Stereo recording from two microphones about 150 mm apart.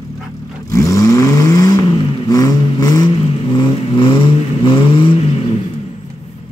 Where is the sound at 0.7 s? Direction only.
20° left (ahead or behind).